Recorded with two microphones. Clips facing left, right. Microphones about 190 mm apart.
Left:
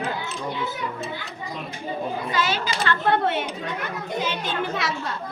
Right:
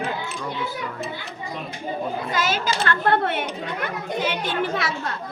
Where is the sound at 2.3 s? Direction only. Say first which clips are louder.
Right 2 dB; 45° right (ahead or behind).